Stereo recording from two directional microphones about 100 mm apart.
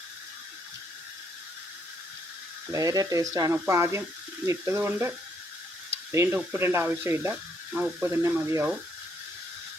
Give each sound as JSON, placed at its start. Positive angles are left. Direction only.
{"t": 2.7, "sound": "speech", "side_deg": -35}